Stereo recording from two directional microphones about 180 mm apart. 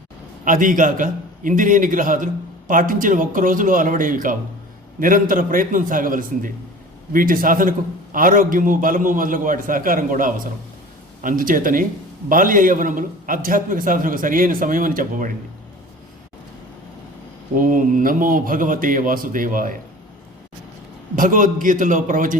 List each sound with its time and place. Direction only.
0.4 s a man's voice: 50° right (ahead or behind)
17.5 s a man's voice: 50° right (ahead or behind)
21.2 s a man's voice: 45° right (ahead or behind)